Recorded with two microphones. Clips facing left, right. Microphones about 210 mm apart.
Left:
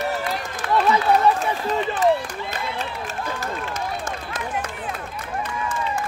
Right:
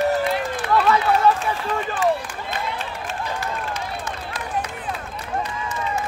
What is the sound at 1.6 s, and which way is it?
Run, 40° left (ahead or behind).